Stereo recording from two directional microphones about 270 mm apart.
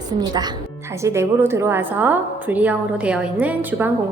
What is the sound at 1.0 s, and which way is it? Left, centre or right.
A woman's voice, centre.